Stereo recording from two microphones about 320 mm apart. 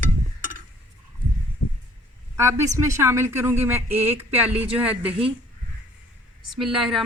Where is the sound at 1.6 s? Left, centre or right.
Left.